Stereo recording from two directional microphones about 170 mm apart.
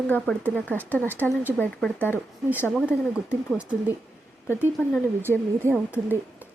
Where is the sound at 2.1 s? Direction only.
10° right (ahead or behind).